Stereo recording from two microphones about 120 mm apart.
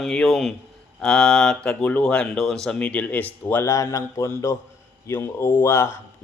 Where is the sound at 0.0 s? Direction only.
5° left (ahead or behind).